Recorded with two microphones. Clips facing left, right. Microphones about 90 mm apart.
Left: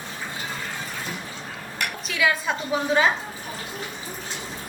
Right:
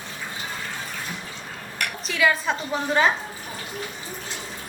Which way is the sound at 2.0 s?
Centre (ahead or behind).